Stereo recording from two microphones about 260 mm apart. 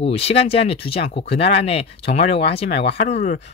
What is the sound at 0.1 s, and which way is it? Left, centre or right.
Speech, left.